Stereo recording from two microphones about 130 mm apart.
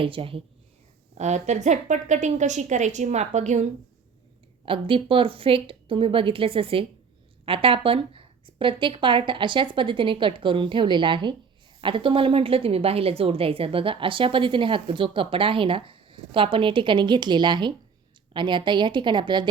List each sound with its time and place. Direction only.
0.0 s a woman's voice: 45° right (ahead or behind)
1.1 s a woman's voice: 60° right (ahead or behind)
4.6 s a woman's voice: 45° right (ahead or behind)